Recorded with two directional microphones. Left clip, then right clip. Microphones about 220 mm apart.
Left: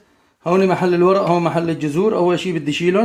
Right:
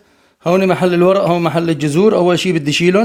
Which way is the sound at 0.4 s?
50° right (ahead or behind).